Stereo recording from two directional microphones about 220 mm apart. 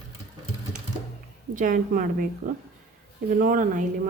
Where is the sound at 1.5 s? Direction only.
35° right (ahead or behind).